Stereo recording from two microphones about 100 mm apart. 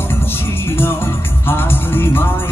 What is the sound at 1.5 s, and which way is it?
Music, 20° left (ahead or behind).